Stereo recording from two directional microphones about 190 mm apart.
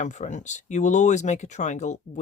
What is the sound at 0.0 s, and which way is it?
Speech, 40° left (ahead or behind).